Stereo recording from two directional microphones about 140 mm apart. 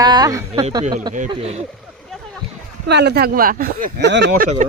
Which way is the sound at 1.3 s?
45° right (ahead or behind).